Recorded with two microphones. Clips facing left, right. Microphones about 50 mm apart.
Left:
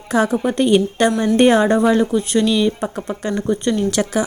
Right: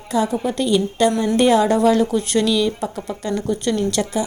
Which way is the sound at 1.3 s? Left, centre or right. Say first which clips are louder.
Left 3 dB; left.